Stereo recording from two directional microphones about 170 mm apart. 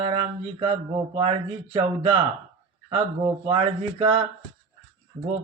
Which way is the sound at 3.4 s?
30° right (ahead or behind).